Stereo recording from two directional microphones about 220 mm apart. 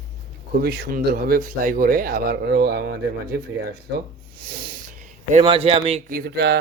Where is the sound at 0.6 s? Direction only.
45° right (ahead or behind).